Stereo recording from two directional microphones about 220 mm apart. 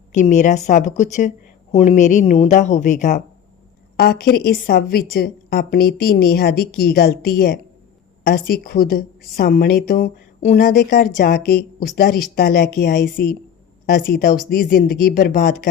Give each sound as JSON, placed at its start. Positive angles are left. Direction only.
{"t": 0.1, "sound": "speech", "side_deg": 35}
{"t": 3.9, "sound": "a woman's voice", "side_deg": 45}
{"t": 13.9, "sound": "speech", "side_deg": 40}